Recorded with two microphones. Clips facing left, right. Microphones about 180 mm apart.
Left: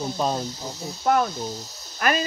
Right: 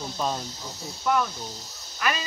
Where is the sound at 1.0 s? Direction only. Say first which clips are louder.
Left 4 dB; 45° left (ahead or behind).